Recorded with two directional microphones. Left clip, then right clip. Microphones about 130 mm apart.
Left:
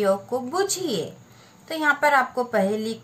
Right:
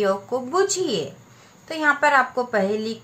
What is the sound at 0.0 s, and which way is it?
Speech, 25° right (ahead or behind).